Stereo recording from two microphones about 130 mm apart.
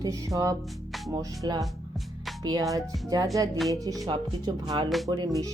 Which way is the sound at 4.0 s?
30° right (ahead or behind).